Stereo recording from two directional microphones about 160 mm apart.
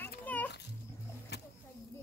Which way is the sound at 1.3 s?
90° left.